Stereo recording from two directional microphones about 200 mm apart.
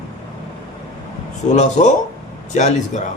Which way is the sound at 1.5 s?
35° left (ahead or behind).